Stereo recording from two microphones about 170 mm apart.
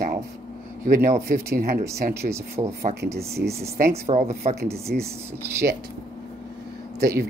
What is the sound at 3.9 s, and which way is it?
Speech, 40° right (ahead or behind).